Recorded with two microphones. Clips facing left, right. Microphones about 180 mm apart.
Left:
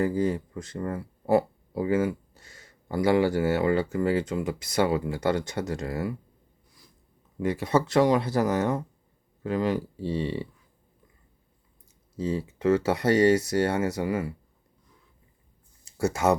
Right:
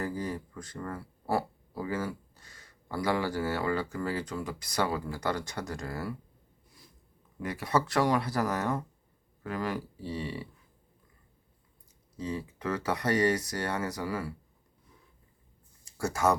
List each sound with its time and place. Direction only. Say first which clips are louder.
0.0 s speech: left 9 dB; 25° left (ahead or behind)
7.4 s speech: left 5 dB; 25° left (ahead or behind)
12.1 s speech: left 6 dB; 30° left (ahead or behind)
15.8 s speech: left 3 dB; 20° left (ahead or behind)